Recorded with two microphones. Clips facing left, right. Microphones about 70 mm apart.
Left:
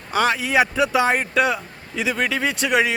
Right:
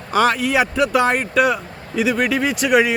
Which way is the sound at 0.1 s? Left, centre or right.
Centre.